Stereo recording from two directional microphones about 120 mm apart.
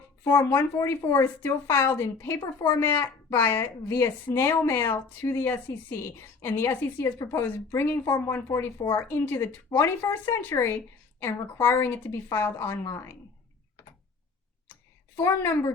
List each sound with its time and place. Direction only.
0.3 s a woman's voice: 20° left (ahead or behind)
15.1 s a woman's voice: 20° left (ahead or behind)